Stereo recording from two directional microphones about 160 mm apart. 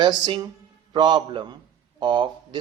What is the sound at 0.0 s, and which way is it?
Speech, 30° right (ahead or behind).